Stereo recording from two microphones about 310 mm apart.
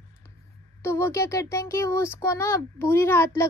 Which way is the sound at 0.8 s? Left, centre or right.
Centre.